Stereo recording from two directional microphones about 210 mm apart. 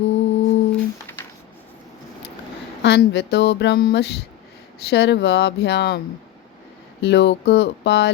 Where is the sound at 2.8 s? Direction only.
55° left (ahead or behind).